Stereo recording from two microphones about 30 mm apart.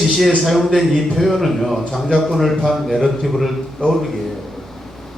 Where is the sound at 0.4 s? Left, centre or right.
Centre.